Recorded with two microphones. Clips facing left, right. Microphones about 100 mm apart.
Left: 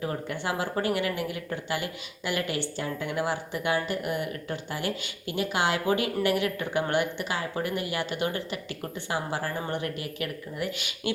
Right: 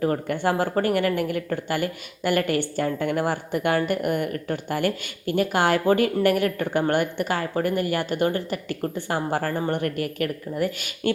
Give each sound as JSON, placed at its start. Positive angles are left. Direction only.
{"t": 0.0, "sound": "speech", "side_deg": -50}